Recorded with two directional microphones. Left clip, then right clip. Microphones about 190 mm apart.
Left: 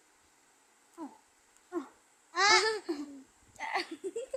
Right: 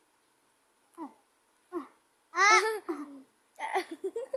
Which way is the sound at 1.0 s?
15° left (ahead or behind).